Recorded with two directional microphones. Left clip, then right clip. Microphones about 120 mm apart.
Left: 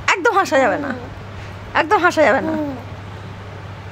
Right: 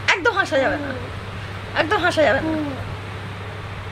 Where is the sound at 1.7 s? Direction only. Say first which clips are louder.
Left 4 dB; 80° left.